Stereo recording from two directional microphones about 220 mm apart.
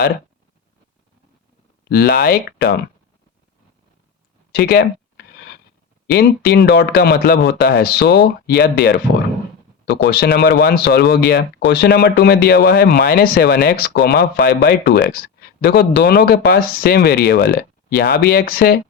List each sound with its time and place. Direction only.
1.9 s speech: 45° left (ahead or behind)
4.5 s speech: 45° left (ahead or behind)
17.6 s a sound: 45° left (ahead or behind)
18.2 s speech: 45° left (ahead or behind)